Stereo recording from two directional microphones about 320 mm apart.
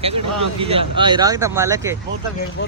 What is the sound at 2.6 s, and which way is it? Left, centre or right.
Speech, left.